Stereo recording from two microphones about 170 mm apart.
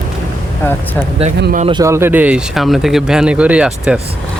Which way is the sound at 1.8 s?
15° right (ahead or behind).